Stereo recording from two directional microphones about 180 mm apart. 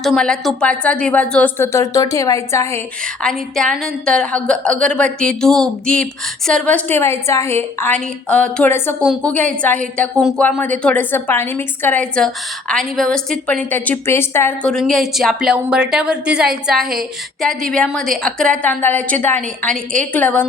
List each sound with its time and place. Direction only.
0.0 s a woman's voice: 5° left (ahead or behind)
3.2 s a woman's voice: 5° left (ahead or behind)